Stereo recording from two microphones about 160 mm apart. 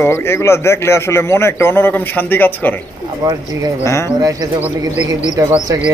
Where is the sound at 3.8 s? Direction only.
20° left (ahead or behind).